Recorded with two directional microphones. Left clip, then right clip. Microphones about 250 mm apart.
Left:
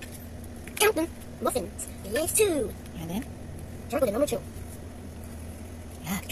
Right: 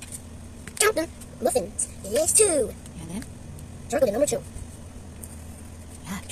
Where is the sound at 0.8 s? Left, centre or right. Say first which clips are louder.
Right 1 dB; right.